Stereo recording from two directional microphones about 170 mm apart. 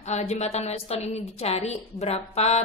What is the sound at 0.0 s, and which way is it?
A woman's voice, 40° left (ahead or behind).